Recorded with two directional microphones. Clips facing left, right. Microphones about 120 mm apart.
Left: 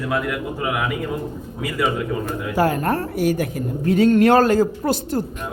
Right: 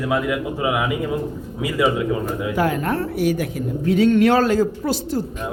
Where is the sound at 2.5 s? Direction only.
40° left (ahead or behind).